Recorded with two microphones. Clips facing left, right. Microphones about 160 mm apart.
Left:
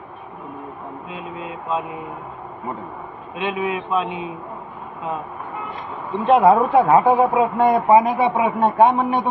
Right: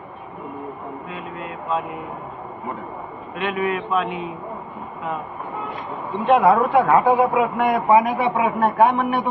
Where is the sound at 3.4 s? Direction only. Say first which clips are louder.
Even; 20° left (ahead or behind).